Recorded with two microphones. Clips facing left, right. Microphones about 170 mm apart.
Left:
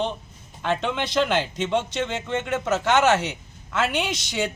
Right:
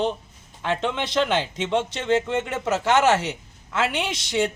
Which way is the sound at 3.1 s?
30° right (ahead or behind).